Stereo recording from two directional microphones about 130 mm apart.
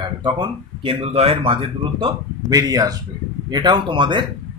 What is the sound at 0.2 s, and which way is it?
Speech, 35° right (ahead or behind).